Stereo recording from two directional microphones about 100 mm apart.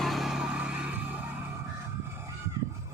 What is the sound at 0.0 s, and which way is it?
Music, centre (ahead or behind).